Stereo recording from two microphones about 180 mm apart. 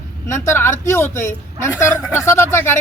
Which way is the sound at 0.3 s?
15° left (ahead or behind).